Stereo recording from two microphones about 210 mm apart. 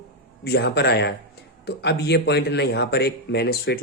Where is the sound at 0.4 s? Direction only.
50° left (ahead or behind).